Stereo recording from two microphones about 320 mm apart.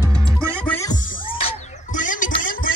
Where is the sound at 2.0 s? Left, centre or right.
Left.